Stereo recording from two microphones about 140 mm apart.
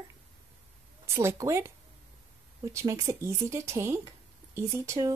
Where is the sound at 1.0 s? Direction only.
20° right (ahead or behind).